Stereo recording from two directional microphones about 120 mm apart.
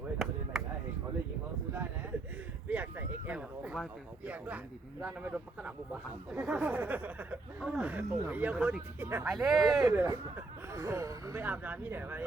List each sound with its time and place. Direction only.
0.2 s chop: centre (ahead or behind)
2.6 s a sound: 15° right (ahead or behind)
4.3 s speech: 10° right (ahead or behind)
9.2 s speech: centre (ahead or behind)
9.9 s speech: 15° right (ahead or behind)
11.4 s speech: 15° right (ahead or behind)